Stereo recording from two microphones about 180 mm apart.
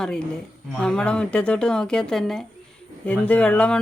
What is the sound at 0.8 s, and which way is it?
Speech, 5° left (ahead or behind).